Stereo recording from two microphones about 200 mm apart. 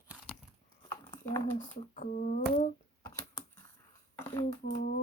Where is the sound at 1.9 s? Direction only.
40° left (ahead or behind).